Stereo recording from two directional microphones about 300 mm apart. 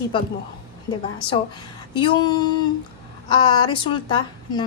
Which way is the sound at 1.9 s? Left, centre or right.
Centre.